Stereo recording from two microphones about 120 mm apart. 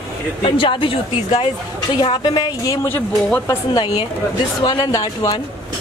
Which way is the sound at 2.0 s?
40° left (ahead or behind).